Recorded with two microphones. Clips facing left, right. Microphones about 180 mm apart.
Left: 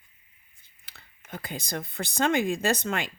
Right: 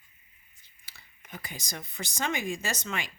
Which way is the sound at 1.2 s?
55° left (ahead or behind).